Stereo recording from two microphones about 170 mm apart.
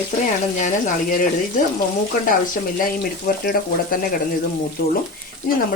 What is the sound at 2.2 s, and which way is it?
Speech, 55° left (ahead or behind).